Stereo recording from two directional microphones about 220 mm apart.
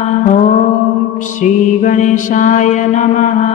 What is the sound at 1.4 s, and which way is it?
Mantra, 35° left (ahead or behind).